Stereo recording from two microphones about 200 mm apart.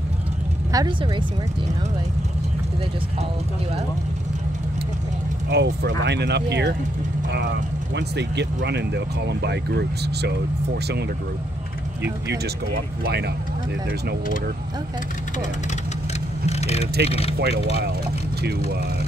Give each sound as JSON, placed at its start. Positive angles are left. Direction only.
{"t": 0.7, "sound": "speech", "side_deg": -25}
{"t": 5.5, "sound": "speech", "side_deg": -55}
{"t": 13.0, "sound": "speech", "side_deg": -55}
{"t": 16.4, "sound": "speech", "side_deg": 30}
{"t": 17.4, "sound": "speech", "side_deg": -55}